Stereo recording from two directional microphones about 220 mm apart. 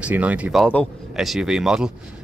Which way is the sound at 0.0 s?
5° right (ahead or behind).